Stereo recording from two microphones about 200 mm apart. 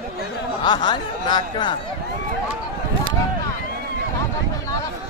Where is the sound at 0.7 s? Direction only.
20° left (ahead or behind).